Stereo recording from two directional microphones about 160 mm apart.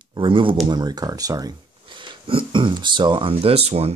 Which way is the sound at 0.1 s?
30° right (ahead or behind).